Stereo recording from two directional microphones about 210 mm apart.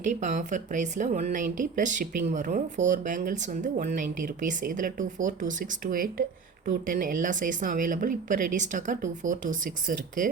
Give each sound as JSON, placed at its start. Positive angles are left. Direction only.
{"t": 0.0, "sound": "speech", "side_deg": -35}